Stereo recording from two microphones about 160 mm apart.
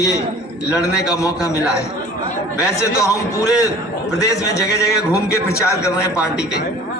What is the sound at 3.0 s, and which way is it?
A man's voice, 20° left (ahead or behind).